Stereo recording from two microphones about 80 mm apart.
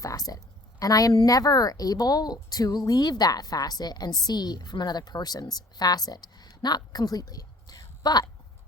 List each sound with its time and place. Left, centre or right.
0.0 s a woman's voice: left